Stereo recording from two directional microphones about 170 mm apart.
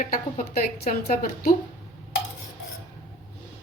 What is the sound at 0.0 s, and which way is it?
A woman's voice, 55° left (ahead or behind).